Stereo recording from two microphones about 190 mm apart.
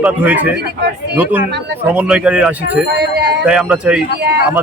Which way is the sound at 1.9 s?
5° right (ahead or behind).